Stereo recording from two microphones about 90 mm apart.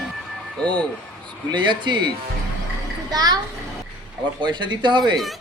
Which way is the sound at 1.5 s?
60° right (ahead or behind).